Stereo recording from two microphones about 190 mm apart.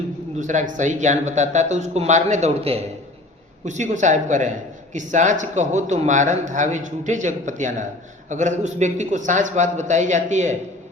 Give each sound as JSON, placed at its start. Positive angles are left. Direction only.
{"t": 0.3, "sound": "speech", "side_deg": -40}